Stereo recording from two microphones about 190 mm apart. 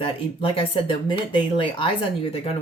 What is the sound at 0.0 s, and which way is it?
Speech, 30° left (ahead or behind).